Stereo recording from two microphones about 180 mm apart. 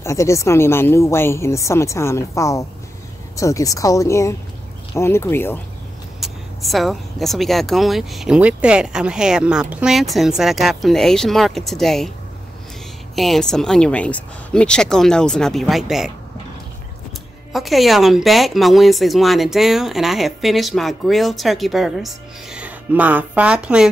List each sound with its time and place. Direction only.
0.0 s a woman's voice: 15° left (ahead or behind)
6.2 s speech: centre (ahead or behind)
13.1 s speech: centre (ahead or behind)
17.5 s speech: centre (ahead or behind)